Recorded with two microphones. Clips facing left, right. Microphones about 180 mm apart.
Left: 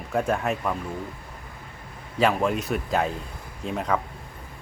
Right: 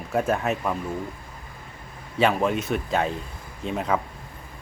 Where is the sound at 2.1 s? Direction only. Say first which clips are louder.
Right 1 dB; centre (ahead or behind).